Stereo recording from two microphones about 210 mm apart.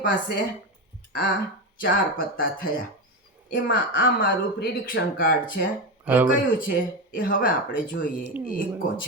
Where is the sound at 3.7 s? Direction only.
55° left (ahead or behind).